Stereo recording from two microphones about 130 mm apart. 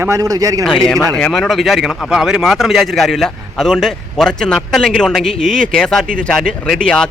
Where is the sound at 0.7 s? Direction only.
5° left (ahead or behind).